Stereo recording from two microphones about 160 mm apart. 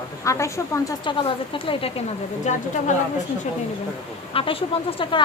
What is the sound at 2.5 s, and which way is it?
Speech, 50° left (ahead or behind).